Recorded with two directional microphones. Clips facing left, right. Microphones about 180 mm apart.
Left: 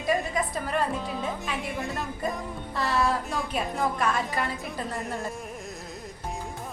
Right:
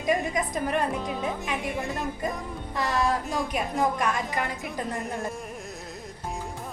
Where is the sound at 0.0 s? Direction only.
15° right (ahead or behind).